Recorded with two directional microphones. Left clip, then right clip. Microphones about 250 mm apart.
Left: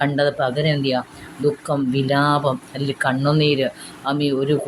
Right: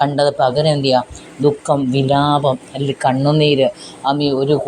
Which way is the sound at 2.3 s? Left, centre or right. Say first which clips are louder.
Right 4 dB; centre.